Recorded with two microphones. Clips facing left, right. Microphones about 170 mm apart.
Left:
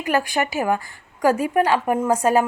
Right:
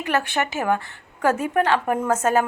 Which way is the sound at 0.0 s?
10° left (ahead or behind).